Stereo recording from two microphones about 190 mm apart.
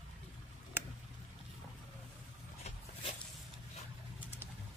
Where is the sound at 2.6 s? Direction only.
35° left (ahead or behind).